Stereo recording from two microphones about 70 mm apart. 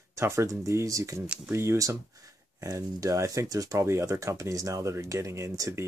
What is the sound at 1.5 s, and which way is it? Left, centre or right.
Speech, right.